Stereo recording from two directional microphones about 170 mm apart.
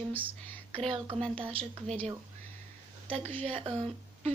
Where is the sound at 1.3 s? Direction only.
30° right (ahead or behind).